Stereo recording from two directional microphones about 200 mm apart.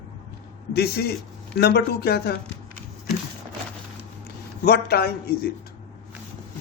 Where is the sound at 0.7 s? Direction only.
50° left (ahead or behind).